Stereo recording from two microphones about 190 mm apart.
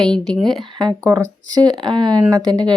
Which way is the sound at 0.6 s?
25° right (ahead or behind).